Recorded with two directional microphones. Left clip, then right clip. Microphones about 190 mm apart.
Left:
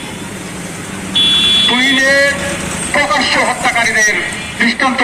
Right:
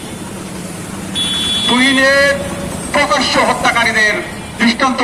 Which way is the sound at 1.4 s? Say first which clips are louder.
Left 3 dB; 60° right (ahead or behind).